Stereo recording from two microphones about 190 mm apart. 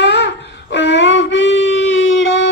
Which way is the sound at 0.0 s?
65° left (ahead or behind).